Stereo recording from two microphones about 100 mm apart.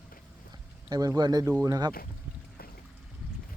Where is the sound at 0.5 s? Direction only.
40° right (ahead or behind).